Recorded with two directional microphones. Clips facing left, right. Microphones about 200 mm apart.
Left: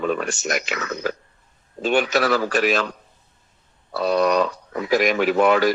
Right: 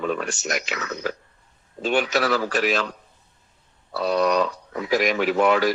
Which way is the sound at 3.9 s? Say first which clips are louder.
Left 2 dB; 50° left (ahead or behind).